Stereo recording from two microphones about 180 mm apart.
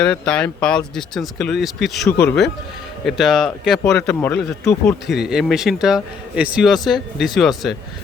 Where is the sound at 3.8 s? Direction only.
15° left (ahead or behind).